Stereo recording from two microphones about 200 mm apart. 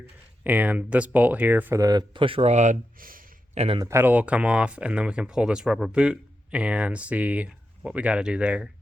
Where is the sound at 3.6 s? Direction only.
30° right (ahead or behind).